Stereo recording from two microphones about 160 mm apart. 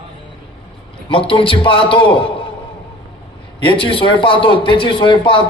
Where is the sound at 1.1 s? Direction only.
35° left (ahead or behind).